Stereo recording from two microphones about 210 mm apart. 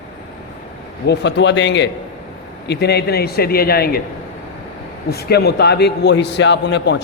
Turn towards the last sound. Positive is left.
turn(degrees=55)  # may be behind; listen again after turning